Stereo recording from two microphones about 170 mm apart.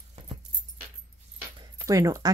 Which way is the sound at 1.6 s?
20° right (ahead or behind).